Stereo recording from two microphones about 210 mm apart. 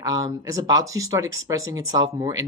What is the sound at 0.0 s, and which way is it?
Speech, 15° right (ahead or behind).